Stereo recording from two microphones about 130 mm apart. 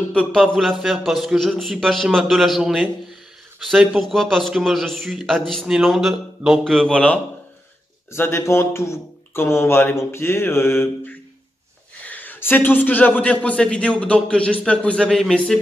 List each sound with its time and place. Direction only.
0.1 s a man's voice: 5° left (ahead or behind)
8.1 s a man's voice: 20° left (ahead or behind); by 15.5 s 5° left (ahead or behind)